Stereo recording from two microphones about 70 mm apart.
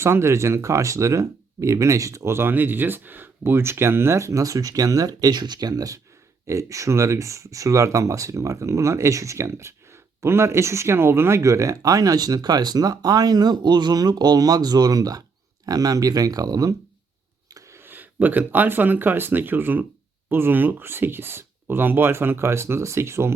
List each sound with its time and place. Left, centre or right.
0.0 s speech: right
6.5 s speech: right
17.7 s speech: right